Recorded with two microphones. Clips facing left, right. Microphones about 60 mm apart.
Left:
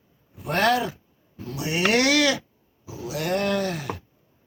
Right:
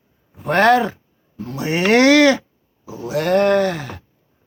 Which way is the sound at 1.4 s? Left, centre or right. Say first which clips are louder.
Right 5 dB; right.